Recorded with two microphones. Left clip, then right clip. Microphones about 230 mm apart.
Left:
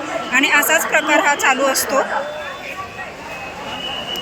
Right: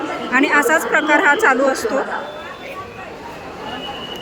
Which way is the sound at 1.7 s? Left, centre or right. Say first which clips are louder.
Left 1 dB; right.